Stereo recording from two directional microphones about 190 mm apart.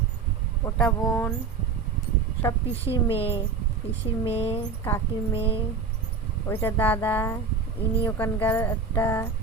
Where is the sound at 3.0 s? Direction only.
30° left (ahead or behind).